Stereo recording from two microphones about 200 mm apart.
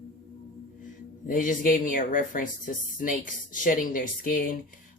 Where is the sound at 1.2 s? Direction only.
45° left (ahead or behind).